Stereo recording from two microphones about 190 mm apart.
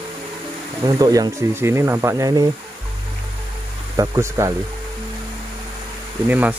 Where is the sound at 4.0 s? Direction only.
15° right (ahead or behind).